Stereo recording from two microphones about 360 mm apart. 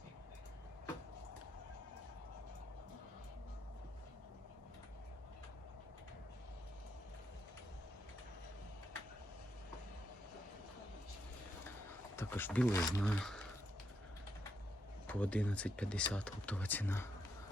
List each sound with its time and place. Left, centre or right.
12.1 s speech: centre
15.0 s speech: centre